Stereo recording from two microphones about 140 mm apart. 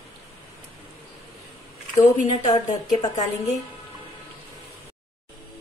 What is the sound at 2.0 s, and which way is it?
Speech, 55° left (ahead or behind).